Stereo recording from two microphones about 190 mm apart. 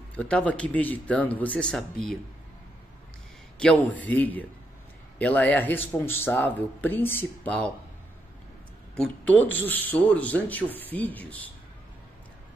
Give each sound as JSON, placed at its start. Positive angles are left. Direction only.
{"t": 0.1, "sound": "speech", "side_deg": 5}
{"t": 3.5, "sound": "speech", "side_deg": 5}
{"t": 9.0, "sound": "speech", "side_deg": 10}